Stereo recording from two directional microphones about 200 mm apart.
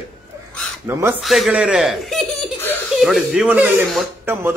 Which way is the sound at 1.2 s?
Centre (ahead or behind).